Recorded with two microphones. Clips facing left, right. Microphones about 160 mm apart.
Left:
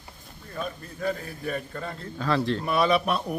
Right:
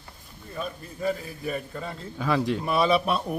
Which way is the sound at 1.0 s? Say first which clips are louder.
Right 1 dB; 5° right (ahead or behind).